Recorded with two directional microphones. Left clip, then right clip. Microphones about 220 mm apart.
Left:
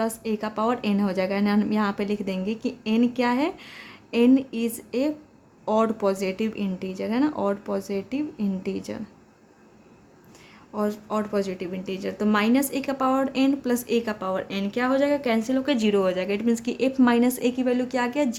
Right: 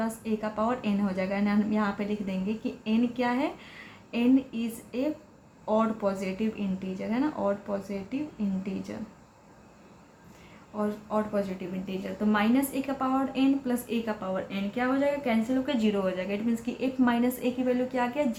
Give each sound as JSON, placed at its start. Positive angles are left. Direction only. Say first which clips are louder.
{"t": 0.0, "sound": "speech", "louder": "left 4 dB", "side_deg": 50}
{"t": 10.8, "sound": "speech", "louder": "left 3 dB", "side_deg": 55}